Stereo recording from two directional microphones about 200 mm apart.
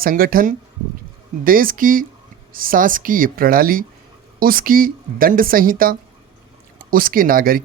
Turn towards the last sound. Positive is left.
turn(degrees=-45)  # may be behind; listen again after turning